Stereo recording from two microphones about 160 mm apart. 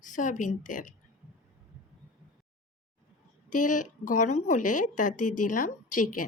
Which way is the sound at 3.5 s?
55° left (ahead or behind).